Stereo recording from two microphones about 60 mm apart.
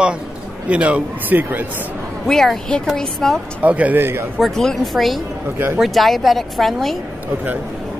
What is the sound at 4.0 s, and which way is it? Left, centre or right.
Speech, right.